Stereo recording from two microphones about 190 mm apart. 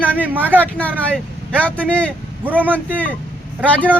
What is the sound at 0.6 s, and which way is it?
Speech, 10° left (ahead or behind).